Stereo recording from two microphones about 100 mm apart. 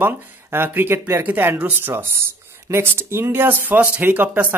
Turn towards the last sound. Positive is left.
turn(degrees=-20)  # may be behind; listen again after turning